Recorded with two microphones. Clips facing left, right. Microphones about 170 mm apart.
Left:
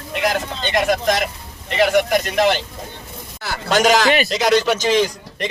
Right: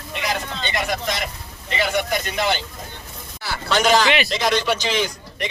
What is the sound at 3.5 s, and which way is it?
A man's voice, 45° left (ahead or behind).